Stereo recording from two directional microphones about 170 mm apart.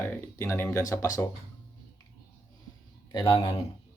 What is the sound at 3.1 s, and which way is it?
Speech, 30° left (ahead or behind).